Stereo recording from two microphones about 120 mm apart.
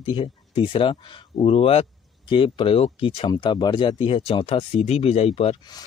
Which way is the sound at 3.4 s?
40° left (ahead or behind).